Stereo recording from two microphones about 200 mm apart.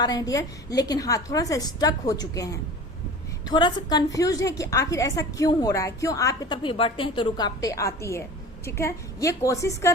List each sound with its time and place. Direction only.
0.0 s a woman's voice: 20° left (ahead or behind)